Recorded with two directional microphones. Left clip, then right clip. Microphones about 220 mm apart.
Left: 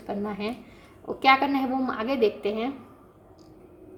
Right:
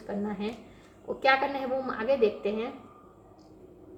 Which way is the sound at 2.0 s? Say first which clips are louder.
Even; 50° left (ahead or behind).